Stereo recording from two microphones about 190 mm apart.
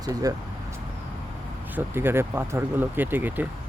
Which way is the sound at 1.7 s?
10° right (ahead or behind).